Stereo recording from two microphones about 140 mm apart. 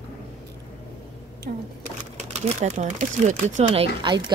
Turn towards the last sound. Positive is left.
turn(degrees=-45)  # may be behind; listen again after turning